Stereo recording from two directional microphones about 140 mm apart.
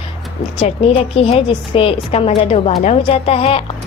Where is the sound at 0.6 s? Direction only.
45° left (ahead or behind).